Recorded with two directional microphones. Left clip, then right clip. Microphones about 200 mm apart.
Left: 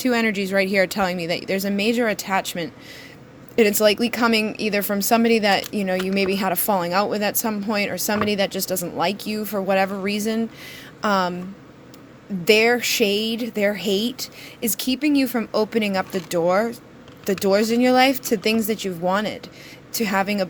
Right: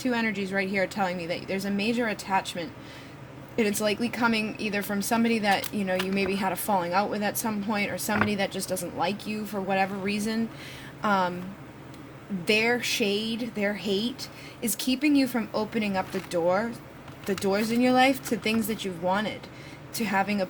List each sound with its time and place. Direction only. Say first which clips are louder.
0.0 s a woman's voice: left 7 dB; 40° left (ahead or behind)
12.5 s a woman's voice: left 7 dB; 35° left (ahead or behind)